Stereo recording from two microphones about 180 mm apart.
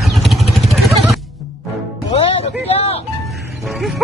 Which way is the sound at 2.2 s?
35° left (ahead or behind).